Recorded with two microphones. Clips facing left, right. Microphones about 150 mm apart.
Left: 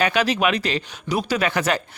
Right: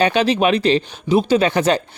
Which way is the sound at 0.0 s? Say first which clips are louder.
Right 4 dB; 30° right (ahead or behind).